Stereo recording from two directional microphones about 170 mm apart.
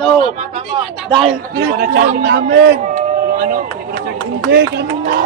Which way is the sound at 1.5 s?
75° right (ahead or behind).